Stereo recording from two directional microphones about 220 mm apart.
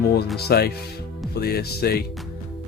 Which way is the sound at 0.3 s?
45° left (ahead or behind).